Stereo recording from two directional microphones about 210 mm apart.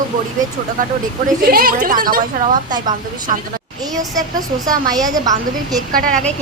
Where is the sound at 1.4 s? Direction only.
45° right (ahead or behind).